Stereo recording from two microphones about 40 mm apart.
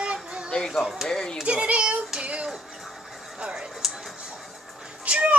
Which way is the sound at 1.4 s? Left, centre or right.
Right.